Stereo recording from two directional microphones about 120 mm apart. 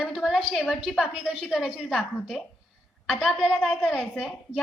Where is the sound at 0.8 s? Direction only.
10° right (ahead or behind).